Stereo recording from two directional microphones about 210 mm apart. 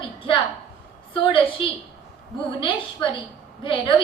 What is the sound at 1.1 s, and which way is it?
A woman's voice, 25° left (ahead or behind).